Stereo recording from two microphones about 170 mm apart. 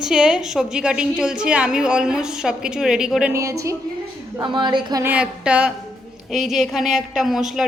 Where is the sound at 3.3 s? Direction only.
20° right (ahead or behind).